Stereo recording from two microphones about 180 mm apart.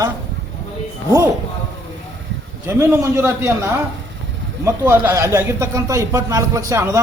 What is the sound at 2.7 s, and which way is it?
A man's voice, 15° right (ahead or behind).